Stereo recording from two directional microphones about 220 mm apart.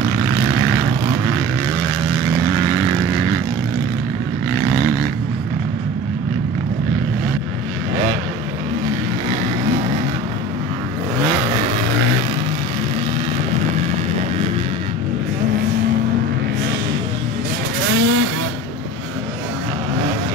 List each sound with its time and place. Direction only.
17.8 s vehicle: 55° right (ahead or behind)